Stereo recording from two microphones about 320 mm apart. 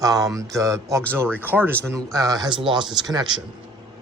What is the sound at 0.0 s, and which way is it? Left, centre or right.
A man's voice, centre.